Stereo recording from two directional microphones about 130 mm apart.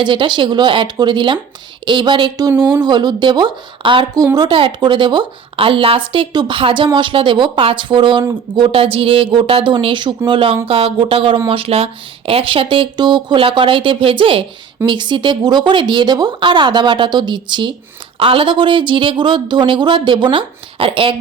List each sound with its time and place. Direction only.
0.0 s a woman's voice: 40° right (ahead or behind)